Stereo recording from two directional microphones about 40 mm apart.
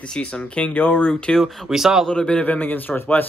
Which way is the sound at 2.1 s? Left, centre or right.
Left.